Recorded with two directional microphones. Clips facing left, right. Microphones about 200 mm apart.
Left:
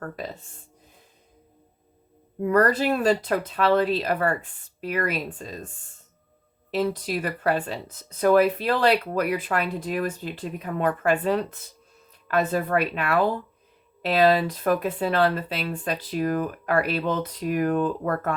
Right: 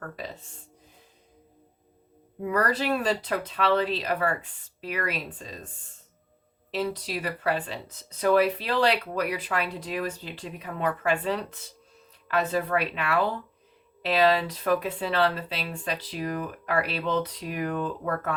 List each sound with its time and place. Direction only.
2.5 s speech: 50° left (ahead or behind)
6.7 s speech: 50° left (ahead or behind)